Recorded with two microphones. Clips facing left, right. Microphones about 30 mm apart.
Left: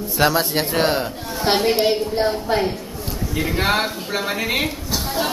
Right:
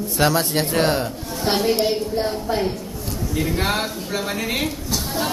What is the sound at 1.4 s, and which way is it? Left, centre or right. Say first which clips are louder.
A woman's voice: left 2 dB; left.